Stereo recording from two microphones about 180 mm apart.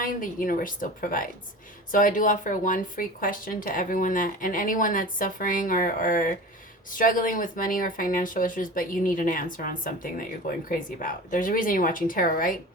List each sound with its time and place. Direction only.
0.0 s speech: 50° left (ahead or behind)